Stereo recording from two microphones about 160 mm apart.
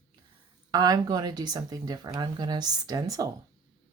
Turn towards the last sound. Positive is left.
turn(degrees=-20)  # may be behind; listen again after turning